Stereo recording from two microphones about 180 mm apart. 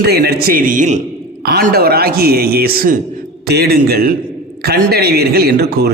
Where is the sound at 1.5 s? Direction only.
60° right (ahead or behind).